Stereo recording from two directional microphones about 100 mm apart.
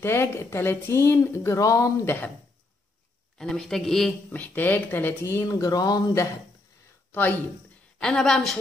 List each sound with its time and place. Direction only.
0.0 s speech: 25° left (ahead or behind)
2.0 s speech: 20° left (ahead or behind)
3.3 s a man's voice: 5° left (ahead or behind)
4.3 s speech: 15° left (ahead or behind); by 6.2 s 40° left (ahead or behind)
7.1 s speech: 20° left (ahead or behind)
8.0 s a man's voice: 5° left (ahead or behind)